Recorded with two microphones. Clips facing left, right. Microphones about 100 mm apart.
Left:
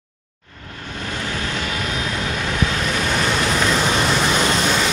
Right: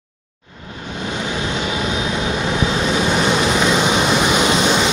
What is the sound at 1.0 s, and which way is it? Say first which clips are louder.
Vehicle: right 3 dB; 20° right (ahead or behind).